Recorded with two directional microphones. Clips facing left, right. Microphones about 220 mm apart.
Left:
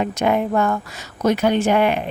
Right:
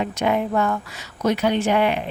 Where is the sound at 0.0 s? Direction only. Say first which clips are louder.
Left 2 dB; 50° left (ahead or behind).